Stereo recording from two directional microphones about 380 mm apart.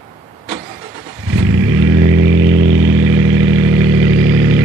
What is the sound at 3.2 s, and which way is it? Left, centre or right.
Vehicle, centre.